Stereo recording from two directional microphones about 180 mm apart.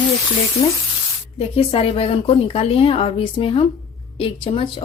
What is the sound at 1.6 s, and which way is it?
A woman's voice, 30° left (ahead or behind).